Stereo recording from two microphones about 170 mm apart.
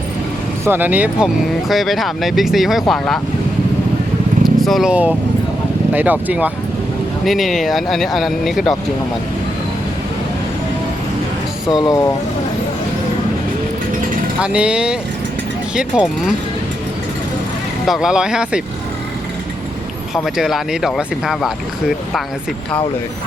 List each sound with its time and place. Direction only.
0.6 s speech: 10° right (ahead or behind)
4.4 s speech: centre (ahead or behind)
11.8 s speech: 20° left (ahead or behind)
14.4 s speech: 5° right (ahead or behind)
17.8 s speech: centre (ahead or behind)
20.1 s speech: centre (ahead or behind)